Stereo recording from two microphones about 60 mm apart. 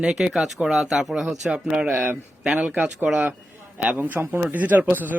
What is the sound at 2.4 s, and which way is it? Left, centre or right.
Speech, centre.